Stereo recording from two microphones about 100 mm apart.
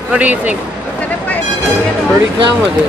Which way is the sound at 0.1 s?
15° right (ahead or behind).